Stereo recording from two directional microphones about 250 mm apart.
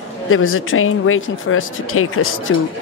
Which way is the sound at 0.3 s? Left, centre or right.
Left.